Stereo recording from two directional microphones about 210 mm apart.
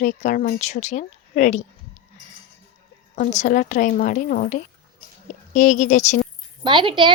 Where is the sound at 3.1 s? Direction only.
35° left (ahead or behind).